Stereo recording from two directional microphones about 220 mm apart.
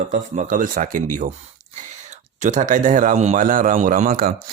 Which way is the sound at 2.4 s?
35° right (ahead or behind).